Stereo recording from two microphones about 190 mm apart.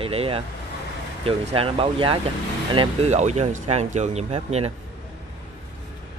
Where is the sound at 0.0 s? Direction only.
30° right (ahead or behind).